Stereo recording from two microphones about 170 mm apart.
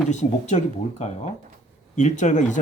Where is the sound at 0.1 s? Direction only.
45° left (ahead or behind).